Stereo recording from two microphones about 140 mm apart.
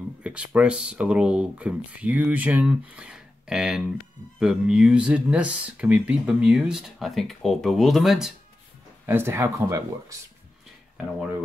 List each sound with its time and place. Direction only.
0.2 s speech: 10° right (ahead or behind)
9.0 s speech: 15° right (ahead or behind)